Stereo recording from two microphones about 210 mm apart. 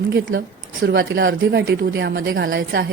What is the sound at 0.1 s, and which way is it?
A woman's voice, 55° right (ahead or behind).